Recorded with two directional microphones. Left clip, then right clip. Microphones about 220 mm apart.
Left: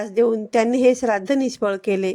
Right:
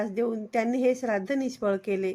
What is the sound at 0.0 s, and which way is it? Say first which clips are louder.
Speech: left 10 dB; 35° left (ahead or behind).